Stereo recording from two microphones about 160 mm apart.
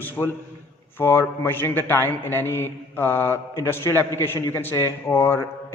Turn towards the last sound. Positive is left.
turn(degrees=15)  # may be behind; listen again after turning